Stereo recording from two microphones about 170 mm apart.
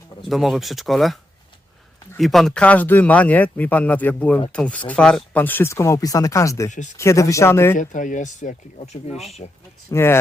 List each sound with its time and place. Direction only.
0.3 s speech: centre (ahead or behind); by 6.7 s 20° left (ahead or behind)
6.7 s speech: 45° left (ahead or behind)
6.9 s speech: 15° left (ahead or behind)
7.8 s speech: 50° left (ahead or behind)
9.9 s speech: 15° left (ahead or behind)